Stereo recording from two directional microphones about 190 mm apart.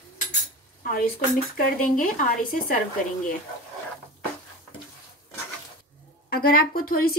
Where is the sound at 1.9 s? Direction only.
45° left (ahead or behind).